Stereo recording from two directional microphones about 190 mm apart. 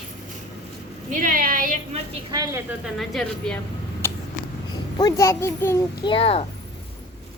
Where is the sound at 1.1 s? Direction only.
45° right (ahead or behind).